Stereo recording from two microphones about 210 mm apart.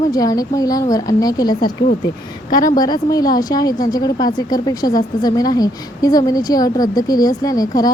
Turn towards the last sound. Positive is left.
turn(degrees=15)  # may be behind; listen again after turning